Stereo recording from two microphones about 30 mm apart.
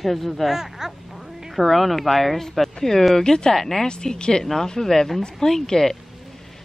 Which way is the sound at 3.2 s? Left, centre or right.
Left.